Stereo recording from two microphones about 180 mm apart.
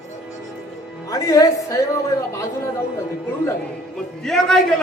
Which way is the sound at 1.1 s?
20° left (ahead or behind).